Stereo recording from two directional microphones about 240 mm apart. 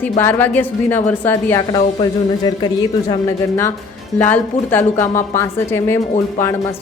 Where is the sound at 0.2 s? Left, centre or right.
Centre.